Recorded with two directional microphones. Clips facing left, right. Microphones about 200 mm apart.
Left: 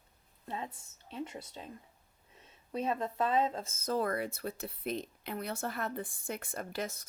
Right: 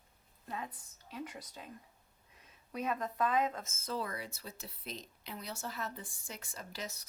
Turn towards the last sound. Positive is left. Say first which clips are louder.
# left 7 dB
turn(degrees=55)  # may be behind; listen again after turning